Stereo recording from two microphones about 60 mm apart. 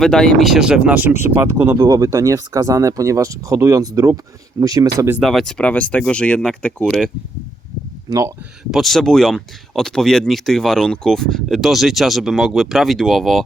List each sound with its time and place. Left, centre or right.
0.0 s speech: centre
0.6 s speech: centre
1.5 s speech: right
1.8 s speech: right
5.2 s speech: centre
5.5 s speech: left
8.7 s speech: centre
11.4 s speech: centre